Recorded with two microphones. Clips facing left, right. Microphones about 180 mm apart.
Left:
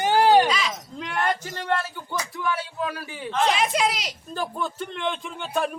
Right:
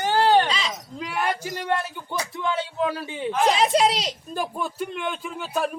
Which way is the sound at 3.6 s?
30° right (ahead or behind).